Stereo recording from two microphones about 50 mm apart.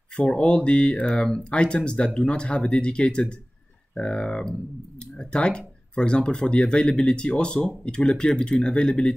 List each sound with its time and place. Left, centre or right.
0.1 s speech: centre